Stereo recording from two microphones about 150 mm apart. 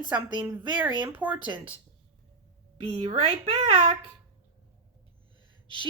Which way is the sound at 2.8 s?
45° right (ahead or behind).